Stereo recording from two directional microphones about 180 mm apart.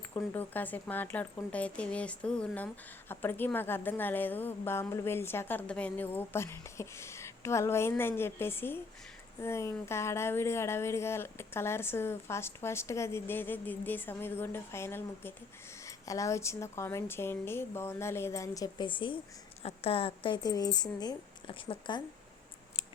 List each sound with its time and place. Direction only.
0.1 s speech: 15° left (ahead or behind)